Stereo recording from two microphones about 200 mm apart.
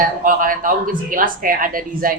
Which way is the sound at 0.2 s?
45° right (ahead or behind).